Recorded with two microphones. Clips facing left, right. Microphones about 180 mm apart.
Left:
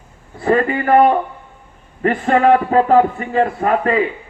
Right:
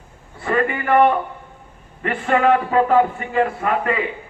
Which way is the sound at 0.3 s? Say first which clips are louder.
Left 5 dB; 35° left (ahead or behind).